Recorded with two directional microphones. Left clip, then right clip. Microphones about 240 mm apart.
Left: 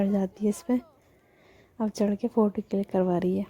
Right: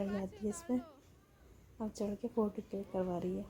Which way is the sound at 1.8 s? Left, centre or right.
Left.